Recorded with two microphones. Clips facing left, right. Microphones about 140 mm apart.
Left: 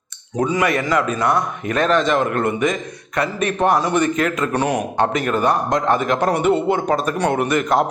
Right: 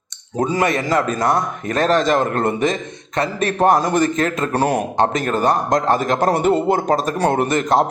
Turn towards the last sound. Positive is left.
turn(degrees=-35)  # may be behind; listen again after turning